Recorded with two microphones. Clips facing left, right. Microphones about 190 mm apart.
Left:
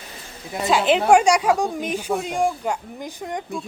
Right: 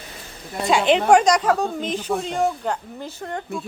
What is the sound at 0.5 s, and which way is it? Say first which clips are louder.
A woman's voice: right 1 dB; centre (ahead or behind).